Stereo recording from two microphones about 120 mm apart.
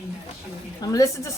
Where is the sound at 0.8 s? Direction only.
30° left (ahead or behind).